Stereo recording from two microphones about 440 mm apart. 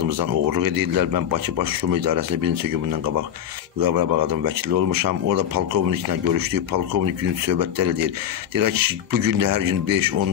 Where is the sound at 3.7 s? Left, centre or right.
Right.